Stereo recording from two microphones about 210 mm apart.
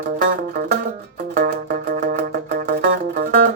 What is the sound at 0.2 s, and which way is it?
Music, 45° right (ahead or behind).